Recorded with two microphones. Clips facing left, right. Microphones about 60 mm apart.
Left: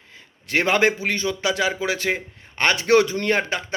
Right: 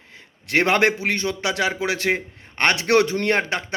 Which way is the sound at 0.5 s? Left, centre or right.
Right.